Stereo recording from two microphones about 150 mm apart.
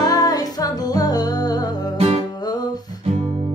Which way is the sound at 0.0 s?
25° left (ahead or behind).